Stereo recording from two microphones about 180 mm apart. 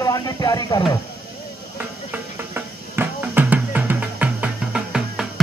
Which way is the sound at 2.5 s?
10° right (ahead or behind).